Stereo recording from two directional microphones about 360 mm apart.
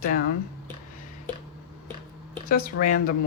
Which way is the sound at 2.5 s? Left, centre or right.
Left.